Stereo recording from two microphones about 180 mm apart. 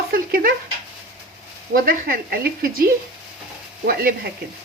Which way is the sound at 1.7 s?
55° right (ahead or behind).